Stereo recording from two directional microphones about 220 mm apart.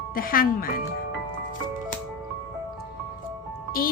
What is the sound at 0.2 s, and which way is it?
Speech, 40° left (ahead or behind).